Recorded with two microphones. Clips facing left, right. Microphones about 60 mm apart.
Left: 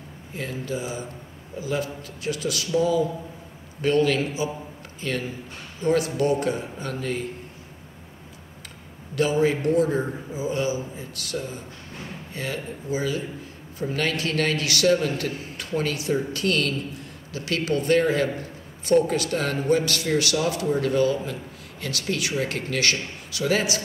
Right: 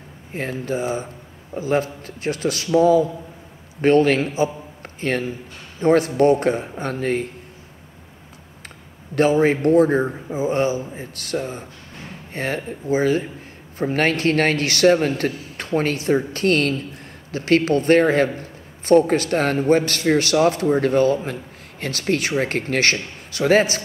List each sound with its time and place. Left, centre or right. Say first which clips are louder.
0.3 s a man's voice: right 5 dB; right
9.1 s a man's voice: right 5 dB; right